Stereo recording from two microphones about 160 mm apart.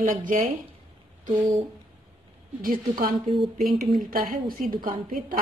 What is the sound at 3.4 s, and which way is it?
Speech, centre (ahead or behind).